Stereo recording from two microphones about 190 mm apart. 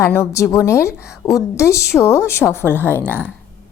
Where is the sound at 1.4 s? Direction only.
15° left (ahead or behind).